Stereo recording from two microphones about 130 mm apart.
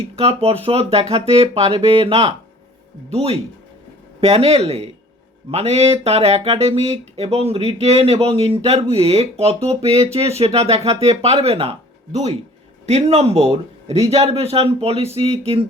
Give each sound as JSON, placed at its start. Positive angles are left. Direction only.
{"t": 0.2, "sound": "speech", "side_deg": -50}
{"t": 12.8, "sound": "speech", "side_deg": -55}